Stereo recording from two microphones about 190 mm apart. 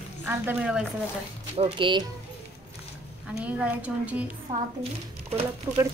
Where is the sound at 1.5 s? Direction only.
25° right (ahead or behind).